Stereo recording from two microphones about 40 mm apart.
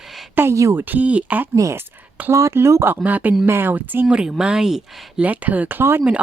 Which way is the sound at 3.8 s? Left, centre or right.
Right.